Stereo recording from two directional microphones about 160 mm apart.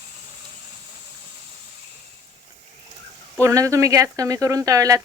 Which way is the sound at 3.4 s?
20° right (ahead or behind).